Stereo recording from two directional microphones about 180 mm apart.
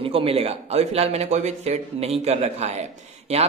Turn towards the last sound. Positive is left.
turn(degrees=-35)  # may be behind; listen again after turning